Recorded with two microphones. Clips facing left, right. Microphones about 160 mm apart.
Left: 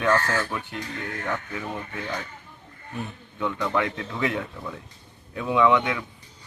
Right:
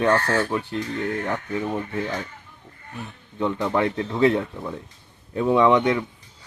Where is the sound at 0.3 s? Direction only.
30° right (ahead or behind).